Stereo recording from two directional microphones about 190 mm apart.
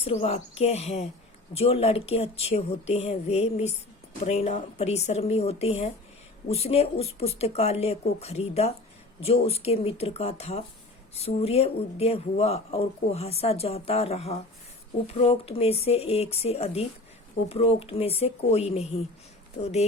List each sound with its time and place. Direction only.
0.0 s speech: 30° left (ahead or behind)